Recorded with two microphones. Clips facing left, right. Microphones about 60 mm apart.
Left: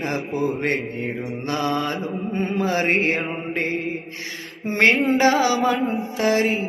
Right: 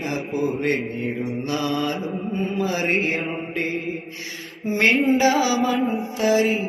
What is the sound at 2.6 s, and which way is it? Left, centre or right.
Mantra, left.